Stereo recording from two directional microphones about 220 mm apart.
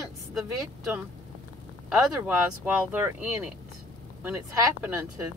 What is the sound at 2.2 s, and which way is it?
Speech, 10° right (ahead or behind).